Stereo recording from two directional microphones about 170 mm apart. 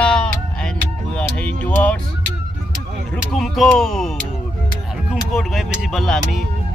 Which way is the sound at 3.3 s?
Centre (ahead or behind).